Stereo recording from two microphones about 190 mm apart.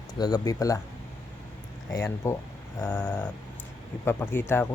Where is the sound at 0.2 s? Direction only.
20° left (ahead or behind).